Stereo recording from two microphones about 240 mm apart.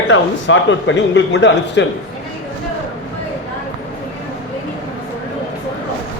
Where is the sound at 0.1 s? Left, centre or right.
Left.